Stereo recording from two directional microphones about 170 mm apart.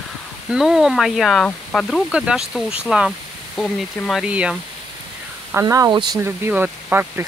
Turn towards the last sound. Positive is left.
turn(degrees=-10)  # may be behind; listen again after turning